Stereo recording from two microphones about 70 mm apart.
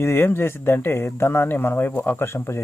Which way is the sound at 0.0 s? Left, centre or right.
Left.